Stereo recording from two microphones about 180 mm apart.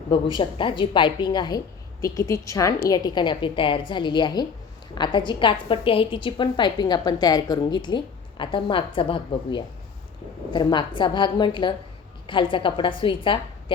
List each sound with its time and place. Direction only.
0.3 s a woman's voice: 25° left (ahead or behind)